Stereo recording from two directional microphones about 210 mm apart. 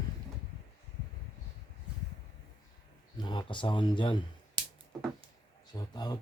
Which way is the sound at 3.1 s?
20° left (ahead or behind).